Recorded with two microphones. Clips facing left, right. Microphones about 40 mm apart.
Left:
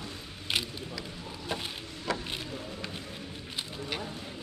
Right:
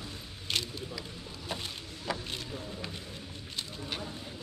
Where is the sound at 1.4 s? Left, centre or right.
Centre.